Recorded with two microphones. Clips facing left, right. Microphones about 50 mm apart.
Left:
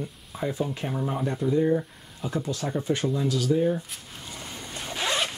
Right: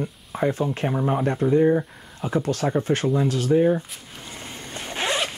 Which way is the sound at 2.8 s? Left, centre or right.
Right.